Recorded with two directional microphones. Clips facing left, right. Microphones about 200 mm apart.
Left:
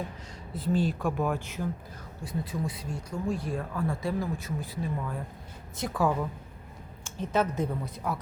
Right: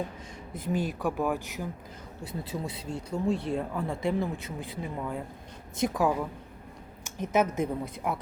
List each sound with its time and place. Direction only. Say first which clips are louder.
0.7 s a woman's voice: left 2 dB; 10° right (ahead or behind)
2.2 s a woman's voice: left 2 dB; 25° right (ahead or behind)